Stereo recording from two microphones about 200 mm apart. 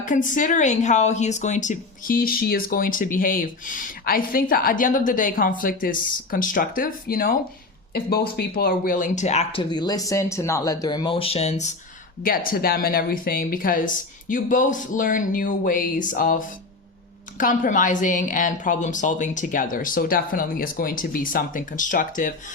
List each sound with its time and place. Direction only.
0.0 s a woman's voice: 40° left (ahead or behind)
12.5 s a woman's voice: 50° left (ahead or behind)